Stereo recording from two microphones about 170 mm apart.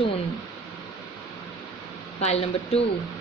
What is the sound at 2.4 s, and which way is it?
Speech, 30° left (ahead or behind).